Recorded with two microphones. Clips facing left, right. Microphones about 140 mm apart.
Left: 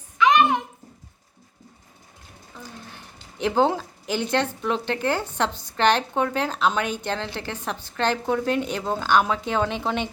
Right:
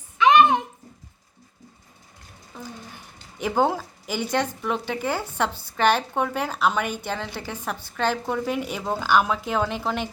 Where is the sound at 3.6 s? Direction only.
10° right (ahead or behind).